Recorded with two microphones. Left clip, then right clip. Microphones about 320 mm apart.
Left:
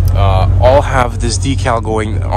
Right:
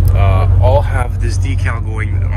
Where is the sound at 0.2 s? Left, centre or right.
Left.